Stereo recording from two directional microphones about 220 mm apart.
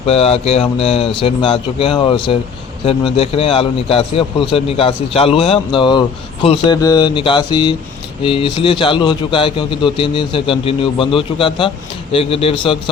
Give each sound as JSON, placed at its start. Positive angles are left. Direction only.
{"t": 0.0, "sound": "a man's voice", "side_deg": 25}